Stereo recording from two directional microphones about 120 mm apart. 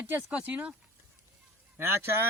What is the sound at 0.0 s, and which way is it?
Speech, 10° right (ahead or behind).